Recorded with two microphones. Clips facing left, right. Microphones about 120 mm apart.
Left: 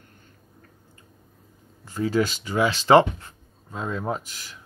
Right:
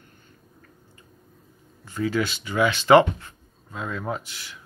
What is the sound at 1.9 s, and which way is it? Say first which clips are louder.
Speech: left 2 dB; 35° left (ahead or behind).